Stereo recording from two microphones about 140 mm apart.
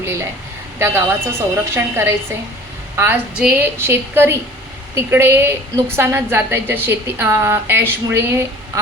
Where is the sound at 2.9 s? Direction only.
15° right (ahead or behind).